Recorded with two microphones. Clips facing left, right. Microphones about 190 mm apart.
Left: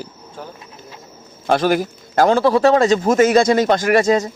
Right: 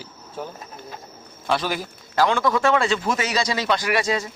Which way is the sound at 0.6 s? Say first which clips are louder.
Right 1 dB; 45° right (ahead or behind).